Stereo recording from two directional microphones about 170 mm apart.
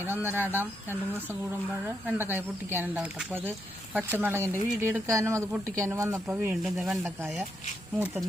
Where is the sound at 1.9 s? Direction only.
10° right (ahead or behind).